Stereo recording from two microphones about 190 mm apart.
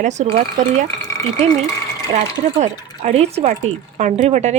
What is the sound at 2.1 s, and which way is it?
A woman's voice, 40° right (ahead or behind).